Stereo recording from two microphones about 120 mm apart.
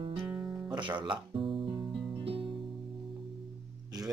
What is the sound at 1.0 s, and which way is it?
Music, 45° right (ahead or behind).